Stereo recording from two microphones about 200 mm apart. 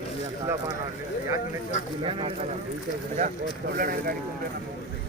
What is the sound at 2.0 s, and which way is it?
Speech, 25° right (ahead or behind).